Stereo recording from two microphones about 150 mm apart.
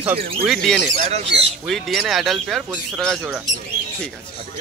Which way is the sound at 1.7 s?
Centre (ahead or behind).